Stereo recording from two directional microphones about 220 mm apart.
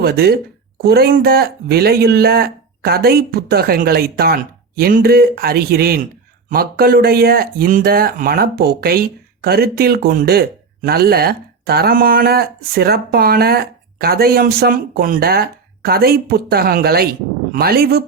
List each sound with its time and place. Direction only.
0.0 s speech: 45° right (ahead or behind)